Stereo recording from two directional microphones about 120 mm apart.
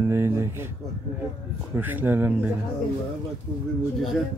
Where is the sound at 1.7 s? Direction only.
15° right (ahead or behind).